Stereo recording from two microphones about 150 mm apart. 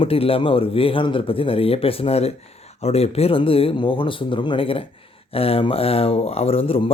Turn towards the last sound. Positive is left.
turn(degrees=40)  # may be behind; listen again after turning